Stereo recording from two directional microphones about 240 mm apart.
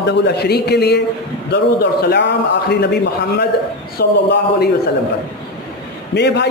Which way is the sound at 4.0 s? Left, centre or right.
Left.